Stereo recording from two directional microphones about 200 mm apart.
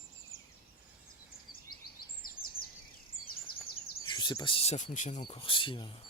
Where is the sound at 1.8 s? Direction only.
45° left (ahead or behind).